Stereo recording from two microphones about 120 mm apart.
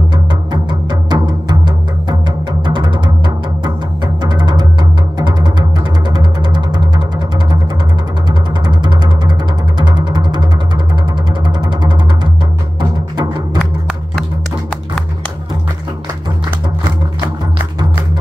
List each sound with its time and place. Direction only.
0.1 s music: 40° right (ahead or behind)
2.6 s music: 40° right (ahead or behind)
8.3 s music: 40° right (ahead or behind)
11.4 s music: 35° right (ahead or behind)